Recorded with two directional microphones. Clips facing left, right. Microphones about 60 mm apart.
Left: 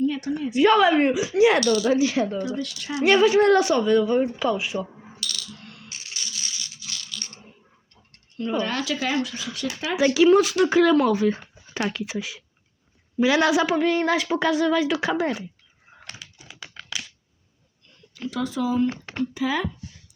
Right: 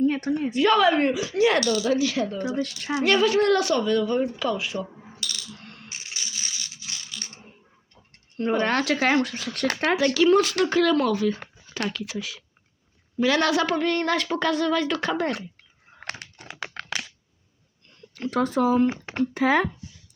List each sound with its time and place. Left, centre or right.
0.0 s speech: right
0.5 s speech: centre
1.6 s a woman's voice: left
2.4 s speech: right
3.0 s a woman's voice: centre
5.2 s speech: right
5.5 s coin: right
5.9 s a sound: right
8.4 s speech: right
10.2 s a woman's voice: centre
16.0 s crumpling: right
18.1 s speech: right
18.9 s speech: right
19.2 s speech: right